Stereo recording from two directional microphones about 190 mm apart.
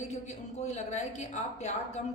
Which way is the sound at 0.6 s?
35° left (ahead or behind).